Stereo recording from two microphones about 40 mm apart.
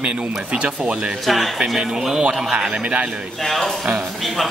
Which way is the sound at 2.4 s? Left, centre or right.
Centre.